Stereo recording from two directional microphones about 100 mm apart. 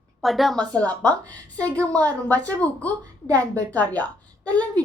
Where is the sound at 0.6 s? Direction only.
10° left (ahead or behind).